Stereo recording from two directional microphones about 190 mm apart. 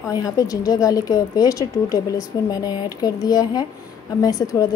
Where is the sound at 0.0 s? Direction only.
20° left (ahead or behind).